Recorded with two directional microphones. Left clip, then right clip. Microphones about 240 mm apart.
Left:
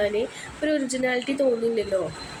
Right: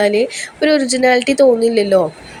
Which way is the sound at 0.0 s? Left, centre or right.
Right.